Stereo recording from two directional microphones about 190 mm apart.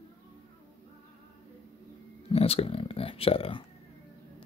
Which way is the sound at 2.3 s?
30° left (ahead or behind).